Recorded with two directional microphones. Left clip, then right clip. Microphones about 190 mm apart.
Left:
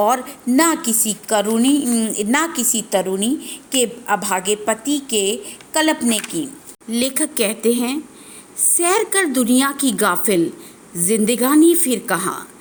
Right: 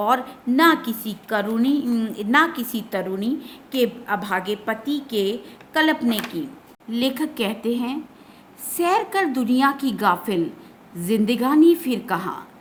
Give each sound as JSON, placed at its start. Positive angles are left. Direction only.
{"t": 0.0, "sound": "a woman's voice", "side_deg": 25}